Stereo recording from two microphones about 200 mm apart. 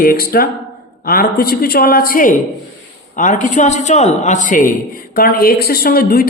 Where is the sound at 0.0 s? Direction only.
45° left (ahead or behind).